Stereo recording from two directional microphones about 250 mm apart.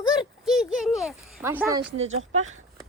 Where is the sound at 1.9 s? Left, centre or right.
Right.